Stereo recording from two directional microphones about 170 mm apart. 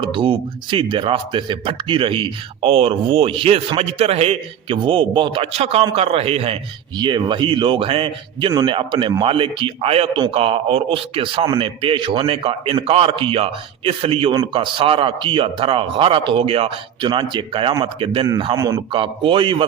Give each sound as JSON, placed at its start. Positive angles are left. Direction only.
{"t": 0.0, "sound": "a man's voice", "side_deg": -30}